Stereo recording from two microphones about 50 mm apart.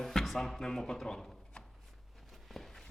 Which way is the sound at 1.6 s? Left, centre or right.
Centre.